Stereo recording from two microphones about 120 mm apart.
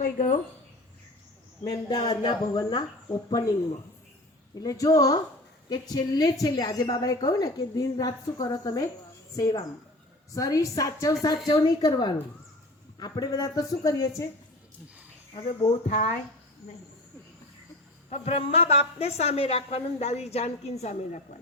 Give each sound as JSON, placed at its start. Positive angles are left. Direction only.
{"t": 0.0, "sound": "speech", "side_deg": 90}
{"t": 1.9, "sound": "a woman's voice", "side_deg": 35}
{"t": 4.6, "sound": "a woman's voice", "side_deg": 30}
{"t": 15.4, "sound": "speech", "side_deg": 85}
{"t": 18.1, "sound": "a woman's voice", "side_deg": 60}